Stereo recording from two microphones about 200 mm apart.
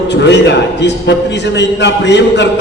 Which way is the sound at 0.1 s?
60° left (ahead or behind).